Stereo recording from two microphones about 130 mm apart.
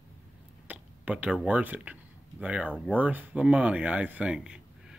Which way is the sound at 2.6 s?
10° left (ahead or behind).